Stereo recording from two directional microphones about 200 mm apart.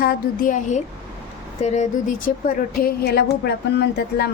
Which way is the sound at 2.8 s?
50° left (ahead or behind).